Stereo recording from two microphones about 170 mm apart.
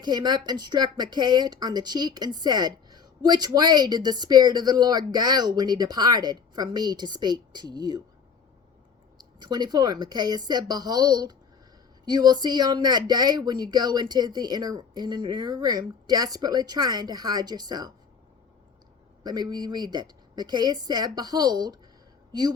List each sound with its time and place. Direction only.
0.0 s speech: 25° right (ahead or behind)
9.4 s speech: 25° right (ahead or behind)
19.2 s a woman's voice: 25° right (ahead or behind)